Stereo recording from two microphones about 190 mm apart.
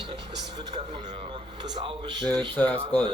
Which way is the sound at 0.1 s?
25° right (ahead or behind).